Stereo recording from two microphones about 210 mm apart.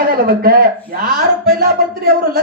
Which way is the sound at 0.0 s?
45° right (ahead or behind).